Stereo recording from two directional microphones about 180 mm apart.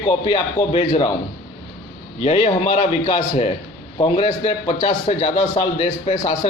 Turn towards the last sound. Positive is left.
turn(degrees=35)  # may be behind; listen again after turning